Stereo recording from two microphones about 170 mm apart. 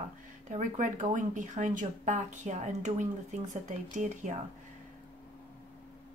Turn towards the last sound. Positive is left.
turn(degrees=-45)  # may be behind; listen again after turning